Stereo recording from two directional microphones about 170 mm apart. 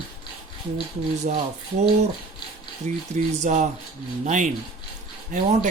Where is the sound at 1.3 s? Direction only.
50° right (ahead or behind).